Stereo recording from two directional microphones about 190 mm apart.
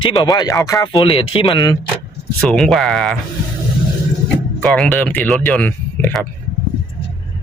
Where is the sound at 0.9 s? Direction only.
30° left (ahead or behind).